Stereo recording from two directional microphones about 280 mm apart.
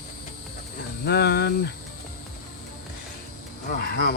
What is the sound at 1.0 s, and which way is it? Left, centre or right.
Speech, left.